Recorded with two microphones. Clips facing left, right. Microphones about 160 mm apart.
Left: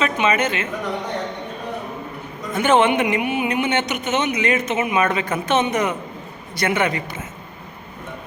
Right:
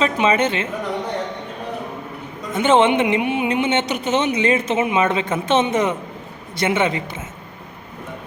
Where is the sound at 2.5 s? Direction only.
25° right (ahead or behind).